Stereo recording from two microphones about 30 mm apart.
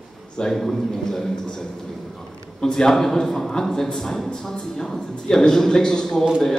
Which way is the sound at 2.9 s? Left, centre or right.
Centre.